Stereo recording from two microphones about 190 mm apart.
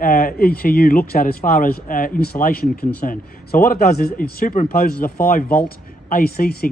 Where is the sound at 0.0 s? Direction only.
50° left (ahead or behind).